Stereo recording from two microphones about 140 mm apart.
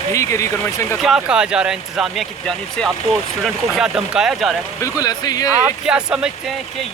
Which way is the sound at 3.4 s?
Centre (ahead or behind).